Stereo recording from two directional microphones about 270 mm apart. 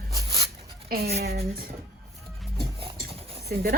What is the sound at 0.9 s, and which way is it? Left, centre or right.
Speech, right.